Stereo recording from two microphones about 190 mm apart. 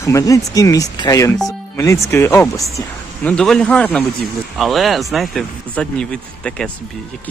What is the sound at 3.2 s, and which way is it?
Speech, 5° left (ahead or behind).